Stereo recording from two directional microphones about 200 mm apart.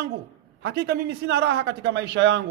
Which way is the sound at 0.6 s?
60° right (ahead or behind).